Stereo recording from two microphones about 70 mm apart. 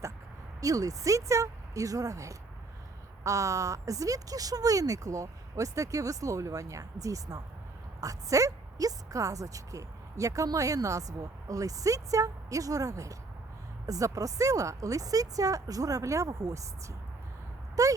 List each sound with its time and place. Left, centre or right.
0.6 s a woman's voice: right